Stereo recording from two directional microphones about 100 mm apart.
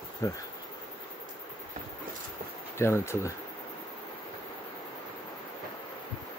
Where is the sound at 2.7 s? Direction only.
25° left (ahead or behind).